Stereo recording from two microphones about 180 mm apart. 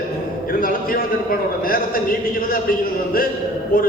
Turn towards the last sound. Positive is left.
turn(degrees=50)  # may be behind; listen again after turning